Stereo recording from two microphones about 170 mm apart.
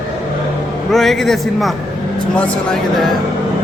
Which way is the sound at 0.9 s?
Centre (ahead or behind).